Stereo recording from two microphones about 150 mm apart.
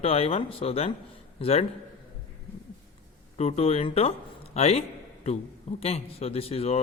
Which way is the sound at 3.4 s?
45° left (ahead or behind).